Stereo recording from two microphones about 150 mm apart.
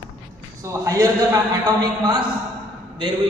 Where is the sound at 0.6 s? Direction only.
20° right (ahead or behind).